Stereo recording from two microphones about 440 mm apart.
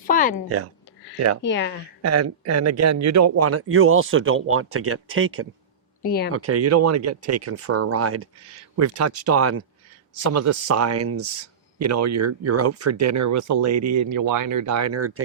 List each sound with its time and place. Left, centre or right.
0.1 s a sound: centre
0.4 s speech: right
1.4 s speech: left
2.0 s speech: right
6.0 s speech: left
6.3 s speech: right